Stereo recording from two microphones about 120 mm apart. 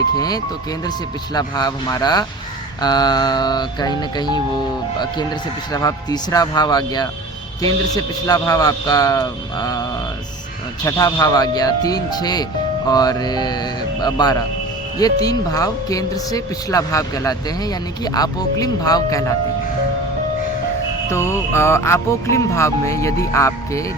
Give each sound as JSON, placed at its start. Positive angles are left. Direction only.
{"t": 0.2, "sound": "speech", "side_deg": 30}
{"t": 21.1, "sound": "speech", "side_deg": 20}